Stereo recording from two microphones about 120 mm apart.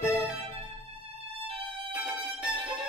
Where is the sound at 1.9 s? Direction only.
10° right (ahead or behind).